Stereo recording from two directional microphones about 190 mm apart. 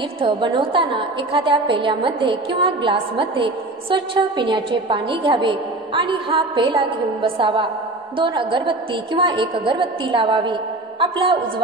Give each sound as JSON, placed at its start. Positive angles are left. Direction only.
{"t": 0.2, "sound": "a woman's voice", "side_deg": -25}